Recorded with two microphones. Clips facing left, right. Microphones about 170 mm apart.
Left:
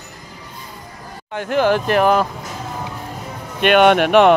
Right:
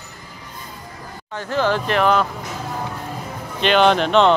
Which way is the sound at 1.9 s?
45° left (ahead or behind).